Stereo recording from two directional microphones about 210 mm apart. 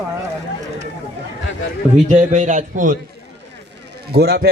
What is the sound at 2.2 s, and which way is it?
Speech, 35° right (ahead or behind).